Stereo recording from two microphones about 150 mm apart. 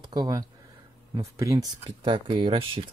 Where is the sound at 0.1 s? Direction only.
25° right (ahead or behind).